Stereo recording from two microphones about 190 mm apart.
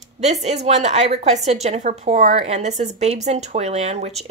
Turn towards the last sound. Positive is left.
turn(degrees=-35)  # may be behind; listen again after turning